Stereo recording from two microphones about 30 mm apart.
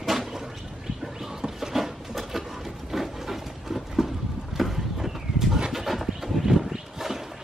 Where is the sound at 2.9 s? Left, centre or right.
Centre.